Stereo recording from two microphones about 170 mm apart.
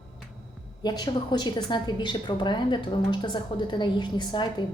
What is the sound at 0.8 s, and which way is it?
A woman's voice, 25° left (ahead or behind).